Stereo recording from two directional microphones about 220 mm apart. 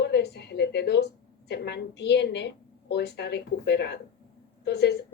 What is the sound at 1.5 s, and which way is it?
Speech, 50° left (ahead or behind).